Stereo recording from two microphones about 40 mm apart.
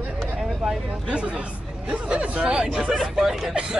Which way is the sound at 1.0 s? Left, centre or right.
Right.